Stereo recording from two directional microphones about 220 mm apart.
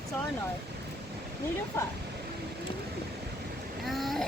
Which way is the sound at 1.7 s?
10° left (ahead or behind).